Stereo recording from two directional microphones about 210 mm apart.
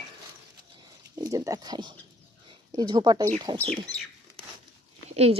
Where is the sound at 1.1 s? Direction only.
15° right (ahead or behind).